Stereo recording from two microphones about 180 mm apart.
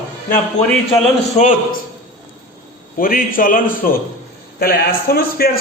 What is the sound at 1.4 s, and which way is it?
Speech, 45° left (ahead or behind).